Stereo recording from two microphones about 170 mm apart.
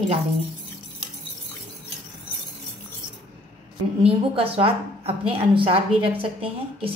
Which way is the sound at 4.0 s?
35° right (ahead or behind).